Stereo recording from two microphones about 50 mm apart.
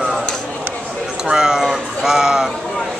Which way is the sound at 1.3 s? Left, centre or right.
Centre.